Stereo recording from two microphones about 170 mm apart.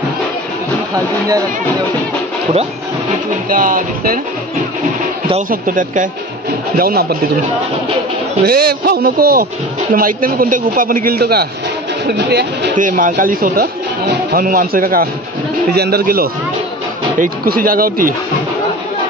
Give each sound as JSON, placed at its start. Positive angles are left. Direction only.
{"t": 3.4, "sound": "speech", "side_deg": -55}
{"t": 5.5, "sound": "speech", "side_deg": -50}
{"t": 6.8, "sound": "speech", "side_deg": -65}
{"t": 8.5, "sound": "speech", "side_deg": -65}
{"t": 12.1, "sound": "speech", "side_deg": -75}
{"t": 12.7, "sound": "speech", "side_deg": -50}